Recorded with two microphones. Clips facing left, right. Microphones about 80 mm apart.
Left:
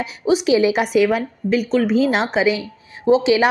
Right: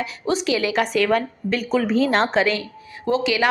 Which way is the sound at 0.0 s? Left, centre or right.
Centre.